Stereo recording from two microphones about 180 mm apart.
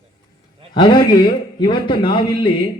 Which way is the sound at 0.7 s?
25° left (ahead or behind).